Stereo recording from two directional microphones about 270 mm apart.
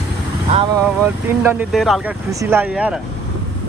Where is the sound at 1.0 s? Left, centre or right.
Centre.